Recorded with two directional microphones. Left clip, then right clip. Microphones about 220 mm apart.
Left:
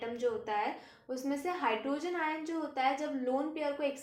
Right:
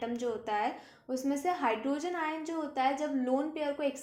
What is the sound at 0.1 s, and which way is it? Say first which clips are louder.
A woman's voice: even; 40° right (ahead or behind).